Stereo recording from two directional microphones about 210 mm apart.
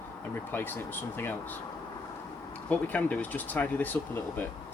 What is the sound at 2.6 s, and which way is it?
Speech, 5° left (ahead or behind).